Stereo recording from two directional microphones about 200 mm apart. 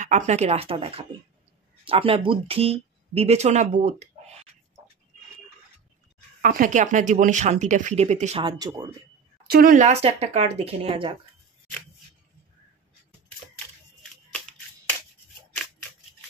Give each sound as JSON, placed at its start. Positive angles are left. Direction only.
{"t": 0.0, "sound": "speech", "side_deg": -35}
{"t": 6.4, "sound": "speech", "side_deg": -40}
{"t": 9.5, "sound": "speech", "side_deg": -45}